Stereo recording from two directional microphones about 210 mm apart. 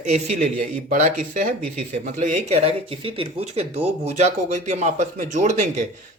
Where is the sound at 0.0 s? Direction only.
35° right (ahead or behind).